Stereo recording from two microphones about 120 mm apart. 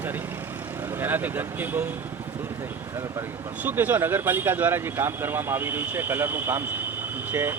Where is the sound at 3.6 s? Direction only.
15° right (ahead or behind).